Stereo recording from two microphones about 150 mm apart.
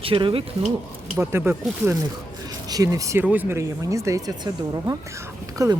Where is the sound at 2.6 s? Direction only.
25° right (ahead or behind).